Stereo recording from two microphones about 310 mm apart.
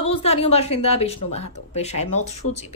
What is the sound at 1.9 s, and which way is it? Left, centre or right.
Speech, left.